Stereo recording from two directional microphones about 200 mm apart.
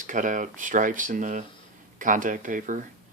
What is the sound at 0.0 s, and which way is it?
Speech, 40° right (ahead or behind).